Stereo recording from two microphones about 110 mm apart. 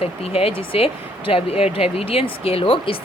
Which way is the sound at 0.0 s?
65° left (ahead or behind).